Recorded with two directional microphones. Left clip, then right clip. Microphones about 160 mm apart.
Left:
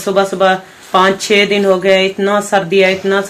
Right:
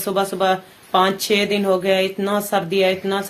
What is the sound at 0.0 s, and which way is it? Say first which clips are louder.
Speech: left 8 dB; 20° right (ahead or behind).